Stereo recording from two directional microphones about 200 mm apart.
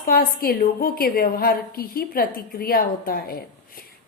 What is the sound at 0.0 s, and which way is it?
A woman's voice, 45° left (ahead or behind).